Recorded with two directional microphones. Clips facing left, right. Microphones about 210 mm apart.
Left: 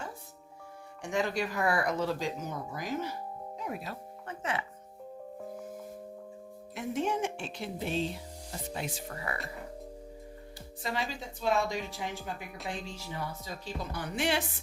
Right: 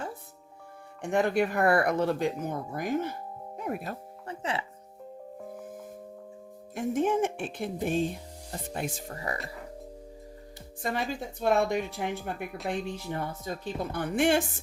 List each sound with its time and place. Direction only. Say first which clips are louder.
1.0 s speech: right 6 dB; 55° right (ahead or behind)
4.3 s music: right 2 dB; 30° right (ahead or behind)
5.4 s music: even; 5° right (ahead or behind)
6.7 s speech: right 5 dB; 50° right (ahead or behind)
11.1 s speech: right 5 dB; 55° right (ahead or behind)